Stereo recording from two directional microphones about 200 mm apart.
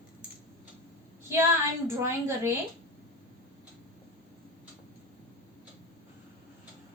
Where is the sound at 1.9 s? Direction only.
15° right (ahead or behind).